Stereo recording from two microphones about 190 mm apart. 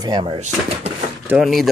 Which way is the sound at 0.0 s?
25° right (ahead or behind).